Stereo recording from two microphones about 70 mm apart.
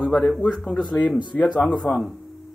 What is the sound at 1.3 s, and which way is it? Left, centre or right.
Speech, left.